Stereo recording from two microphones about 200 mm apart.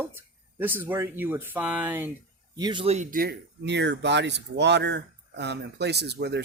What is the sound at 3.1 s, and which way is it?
Speech, 50° right (ahead or behind).